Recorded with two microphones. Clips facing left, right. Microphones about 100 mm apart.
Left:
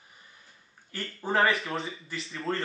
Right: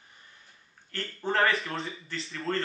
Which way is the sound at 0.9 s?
10° left (ahead or behind).